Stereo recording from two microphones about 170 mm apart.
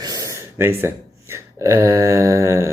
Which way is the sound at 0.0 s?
20° right (ahead or behind).